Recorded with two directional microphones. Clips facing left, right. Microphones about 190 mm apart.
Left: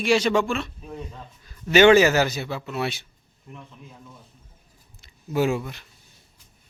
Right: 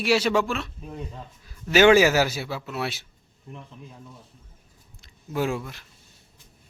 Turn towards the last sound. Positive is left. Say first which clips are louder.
# left 4 dB
turn(degrees=0)  # may be behind; listen again after turning